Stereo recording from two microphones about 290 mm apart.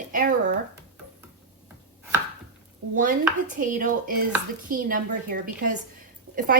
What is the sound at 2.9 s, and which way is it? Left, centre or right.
Dishes, right.